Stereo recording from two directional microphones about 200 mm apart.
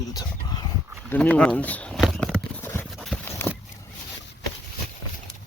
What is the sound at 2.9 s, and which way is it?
Clip-clop, centre (ahead or behind).